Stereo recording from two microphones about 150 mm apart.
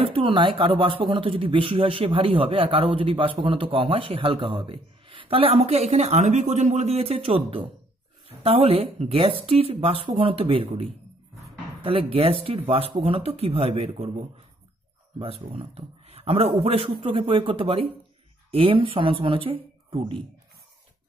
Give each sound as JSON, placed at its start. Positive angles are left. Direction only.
{"t": 0.0, "sound": "speech", "side_deg": -35}